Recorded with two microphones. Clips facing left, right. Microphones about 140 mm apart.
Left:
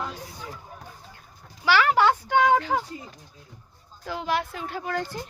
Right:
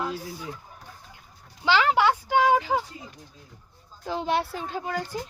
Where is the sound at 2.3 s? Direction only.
5° right (ahead or behind).